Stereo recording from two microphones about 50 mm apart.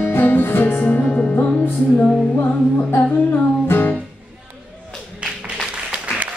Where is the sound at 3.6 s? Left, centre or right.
Left.